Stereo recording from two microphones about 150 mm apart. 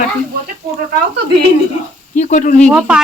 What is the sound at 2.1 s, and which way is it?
Speech, 55° left (ahead or behind).